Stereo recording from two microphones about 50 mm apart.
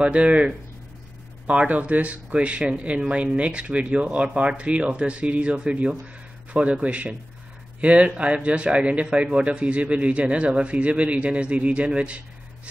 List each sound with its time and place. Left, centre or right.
0.0 s speech: right
1.5 s speech: right